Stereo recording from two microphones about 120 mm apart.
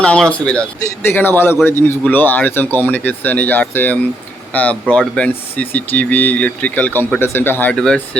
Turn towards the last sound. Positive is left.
turn(degrees=5)  # may be behind; listen again after turning